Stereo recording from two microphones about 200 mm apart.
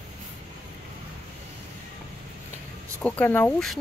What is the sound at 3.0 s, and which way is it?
Speech, 10° left (ahead or behind).